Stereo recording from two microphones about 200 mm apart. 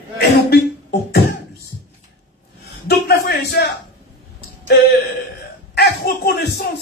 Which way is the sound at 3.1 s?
55° left (ahead or behind).